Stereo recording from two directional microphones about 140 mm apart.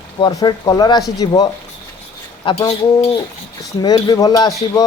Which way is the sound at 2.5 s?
35° left (ahead or behind).